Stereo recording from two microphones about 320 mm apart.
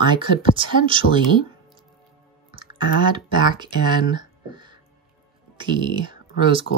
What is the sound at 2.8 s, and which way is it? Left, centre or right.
Speech, centre.